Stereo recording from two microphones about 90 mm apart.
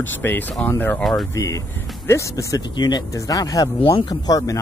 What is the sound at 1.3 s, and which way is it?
Speech, 40° left (ahead or behind).